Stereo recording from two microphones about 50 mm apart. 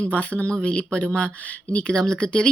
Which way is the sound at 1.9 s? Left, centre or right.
Centre.